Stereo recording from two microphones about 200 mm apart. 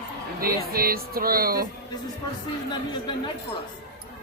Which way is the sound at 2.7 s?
20° left (ahead or behind).